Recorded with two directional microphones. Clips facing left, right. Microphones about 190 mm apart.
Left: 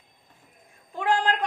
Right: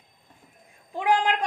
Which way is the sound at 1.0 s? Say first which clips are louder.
Right 1 dB; 15° right (ahead or behind).